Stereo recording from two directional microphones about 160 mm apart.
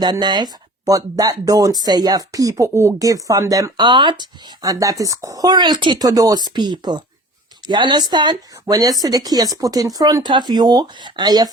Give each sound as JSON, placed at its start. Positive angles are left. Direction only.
{"t": 0.0, "sound": "speech", "side_deg": -25}